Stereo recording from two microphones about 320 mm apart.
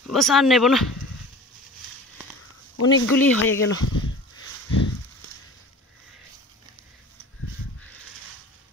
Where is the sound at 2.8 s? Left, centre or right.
Left.